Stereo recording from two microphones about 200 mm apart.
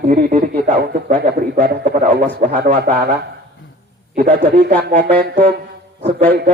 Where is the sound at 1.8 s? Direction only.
40° right (ahead or behind).